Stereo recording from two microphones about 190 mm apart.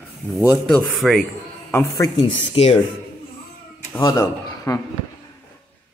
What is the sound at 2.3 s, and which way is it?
Speech, 35° left (ahead or behind).